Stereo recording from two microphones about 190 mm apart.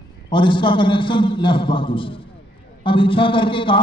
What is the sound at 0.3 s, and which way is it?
A man's voice, 25° left (ahead or behind).